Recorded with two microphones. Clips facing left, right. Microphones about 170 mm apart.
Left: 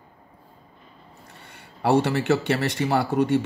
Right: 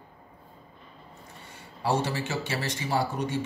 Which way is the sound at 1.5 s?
65° left (ahead or behind).